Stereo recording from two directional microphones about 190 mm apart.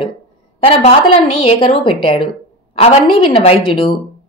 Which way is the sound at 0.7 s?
30° left (ahead or behind).